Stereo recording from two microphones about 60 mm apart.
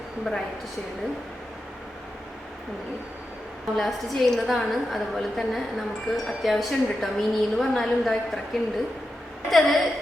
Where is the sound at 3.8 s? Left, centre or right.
Centre.